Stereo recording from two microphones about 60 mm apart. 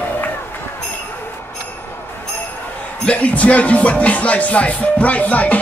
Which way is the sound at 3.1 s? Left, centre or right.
Left.